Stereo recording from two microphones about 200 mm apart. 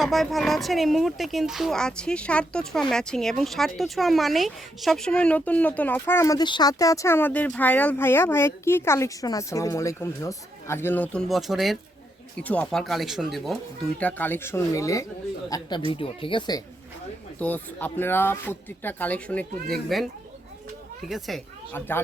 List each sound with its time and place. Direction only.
0.0 s a child's voice: centre (ahead or behind); by 16.6 s 20° left (ahead or behind)
17.4 s speech: 10° left (ahead or behind)
21.1 s speech: centre (ahead or behind)